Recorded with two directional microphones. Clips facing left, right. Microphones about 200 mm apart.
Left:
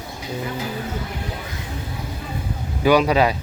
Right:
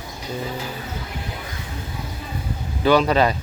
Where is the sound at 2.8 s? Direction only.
10° left (ahead or behind).